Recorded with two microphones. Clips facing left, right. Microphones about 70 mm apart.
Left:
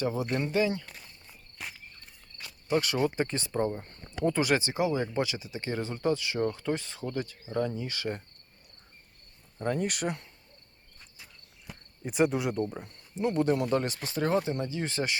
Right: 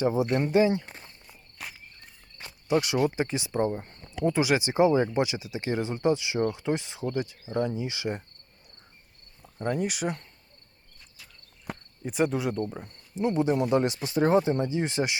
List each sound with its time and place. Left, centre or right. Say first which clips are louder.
0.0 s speech: right 5 dB; right
1.6 s insect: right 1 dB; centre
2.8 s speech: right 2 dB; centre
4.6 s speech: right 7 dB; right
9.6 s speech: right 2 dB; centre
11.7 s cricket: right 10 dB; right
12.0 s speech: even; centre
14.1 s speech: right 5 dB; right